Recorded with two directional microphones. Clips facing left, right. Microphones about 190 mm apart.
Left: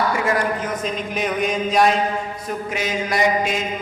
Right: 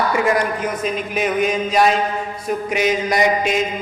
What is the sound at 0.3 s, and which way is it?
A man's voice, 10° right (ahead or behind).